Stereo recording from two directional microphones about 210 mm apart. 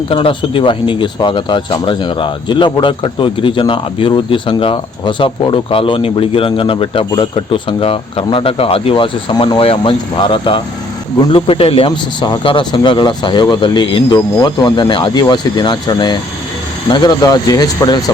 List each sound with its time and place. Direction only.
0.1 s speech: 25° left (ahead or behind)